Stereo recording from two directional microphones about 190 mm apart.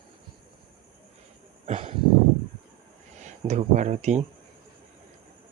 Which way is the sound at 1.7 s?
30° right (ahead or behind).